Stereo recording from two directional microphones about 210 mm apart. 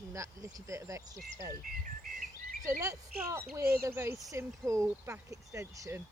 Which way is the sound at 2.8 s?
15° right (ahead or behind).